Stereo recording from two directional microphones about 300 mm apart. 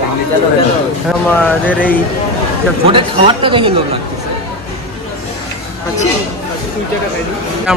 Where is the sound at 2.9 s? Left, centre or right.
Centre.